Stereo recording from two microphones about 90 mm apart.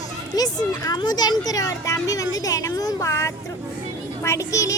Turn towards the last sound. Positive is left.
turn(degrees=35)  # may be behind; listen again after turning